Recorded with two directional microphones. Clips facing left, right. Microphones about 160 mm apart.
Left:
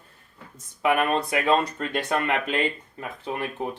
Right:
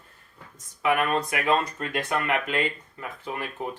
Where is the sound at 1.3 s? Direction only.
25° left (ahead or behind).